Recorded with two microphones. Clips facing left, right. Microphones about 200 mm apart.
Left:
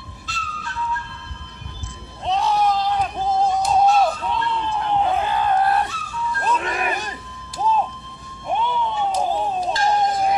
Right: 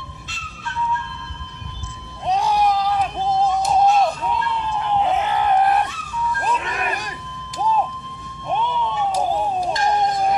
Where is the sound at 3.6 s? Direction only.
5° left (ahead or behind).